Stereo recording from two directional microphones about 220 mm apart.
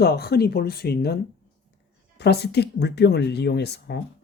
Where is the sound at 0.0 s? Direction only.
45° left (ahead or behind).